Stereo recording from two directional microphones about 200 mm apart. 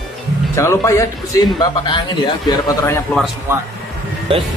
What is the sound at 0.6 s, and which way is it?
Speech, 15° left (ahead or behind).